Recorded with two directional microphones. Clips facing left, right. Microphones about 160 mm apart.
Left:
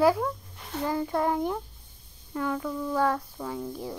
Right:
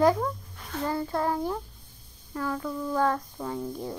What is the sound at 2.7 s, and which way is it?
Speech, centre (ahead or behind).